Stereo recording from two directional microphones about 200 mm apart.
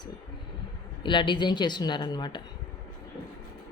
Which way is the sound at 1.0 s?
25° left (ahead or behind).